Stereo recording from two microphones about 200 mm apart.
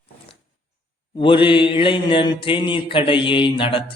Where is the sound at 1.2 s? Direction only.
25° left (ahead or behind).